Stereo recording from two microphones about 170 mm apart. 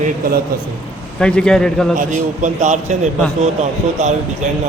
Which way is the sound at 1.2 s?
5° left (ahead or behind).